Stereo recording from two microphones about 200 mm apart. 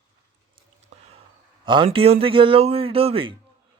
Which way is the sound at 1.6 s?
25° right (ahead or behind).